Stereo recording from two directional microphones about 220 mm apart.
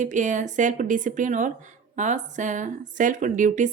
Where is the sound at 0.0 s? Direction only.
35° right (ahead or behind).